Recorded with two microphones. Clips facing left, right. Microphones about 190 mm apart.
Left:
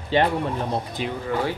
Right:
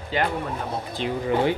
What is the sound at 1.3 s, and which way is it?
Speech, 20° right (ahead or behind).